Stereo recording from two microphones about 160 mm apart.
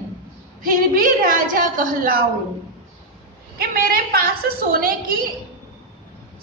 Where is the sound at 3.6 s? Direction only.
70° right (ahead or behind).